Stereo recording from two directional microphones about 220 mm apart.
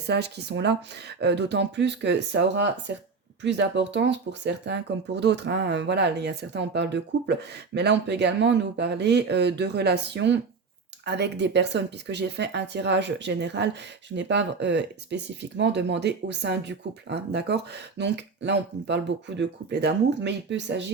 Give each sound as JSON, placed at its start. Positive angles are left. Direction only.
{"t": 0.0, "sound": "speech", "side_deg": -50}